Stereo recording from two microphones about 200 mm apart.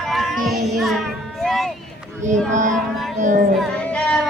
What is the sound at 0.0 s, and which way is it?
Child singing, centre (ahead or behind).